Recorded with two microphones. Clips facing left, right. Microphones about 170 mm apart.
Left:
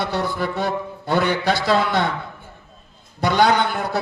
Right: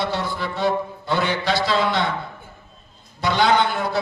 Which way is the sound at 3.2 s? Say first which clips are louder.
Left 1 dB; 55° left (ahead or behind).